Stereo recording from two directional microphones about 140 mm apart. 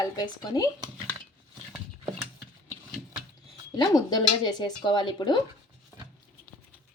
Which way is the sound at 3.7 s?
30° left (ahead or behind).